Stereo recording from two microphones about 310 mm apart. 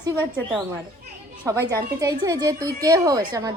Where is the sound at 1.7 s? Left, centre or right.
Centre.